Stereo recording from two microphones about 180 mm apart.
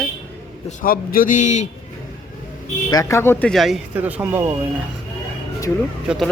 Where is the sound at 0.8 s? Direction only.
50° left (ahead or behind).